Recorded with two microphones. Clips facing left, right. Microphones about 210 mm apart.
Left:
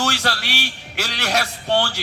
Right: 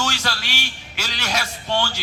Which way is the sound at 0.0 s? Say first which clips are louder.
Left 3 dB; 60° left (ahead or behind).